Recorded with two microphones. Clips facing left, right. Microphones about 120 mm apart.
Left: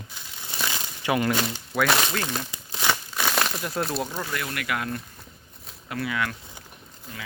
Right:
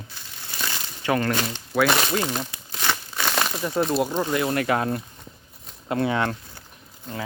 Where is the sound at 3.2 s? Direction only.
Centre (ahead or behind).